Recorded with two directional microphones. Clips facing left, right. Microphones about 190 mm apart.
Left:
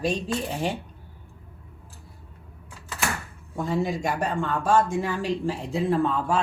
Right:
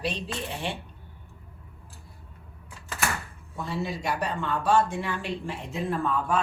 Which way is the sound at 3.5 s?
45° left (ahead or behind).